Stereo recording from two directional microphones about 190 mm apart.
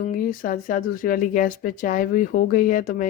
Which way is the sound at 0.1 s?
45° left (ahead or behind).